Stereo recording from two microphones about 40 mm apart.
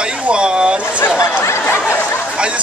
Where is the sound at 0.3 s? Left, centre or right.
Right.